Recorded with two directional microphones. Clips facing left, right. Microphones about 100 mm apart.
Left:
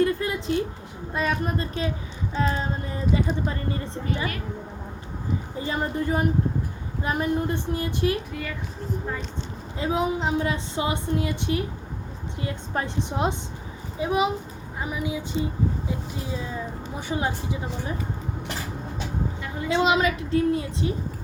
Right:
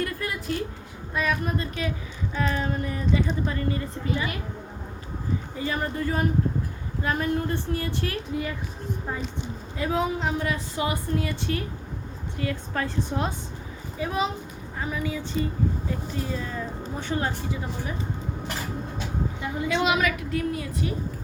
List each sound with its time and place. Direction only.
0.0 s a sound: 25° left (ahead or behind)
1.1 s a woman's voice: 30° left (ahead or behind)
5.5 s a woman's voice: 25° left (ahead or behind)
9.7 s a woman's voice: 20° left (ahead or behind)
19.6 s a woman's voice: 25° left (ahead or behind)